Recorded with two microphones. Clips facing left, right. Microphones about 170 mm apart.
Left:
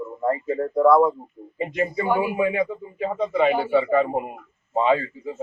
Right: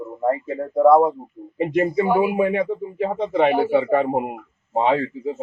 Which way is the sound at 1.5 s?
60° right (ahead or behind).